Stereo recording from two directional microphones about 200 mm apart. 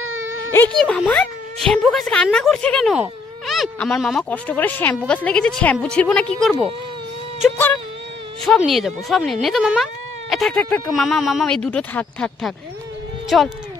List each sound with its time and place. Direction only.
0.5 s speech: 10° left (ahead or behind)
8.5 s speech: centre (ahead or behind)